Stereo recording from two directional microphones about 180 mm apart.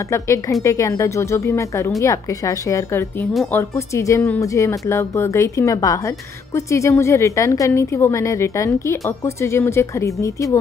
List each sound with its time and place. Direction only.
0.1 s speech: 15° left (ahead or behind)